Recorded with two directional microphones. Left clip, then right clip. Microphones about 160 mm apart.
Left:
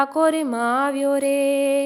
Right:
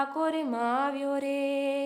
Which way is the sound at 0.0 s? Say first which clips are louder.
Left 10 dB; 35° left (ahead or behind).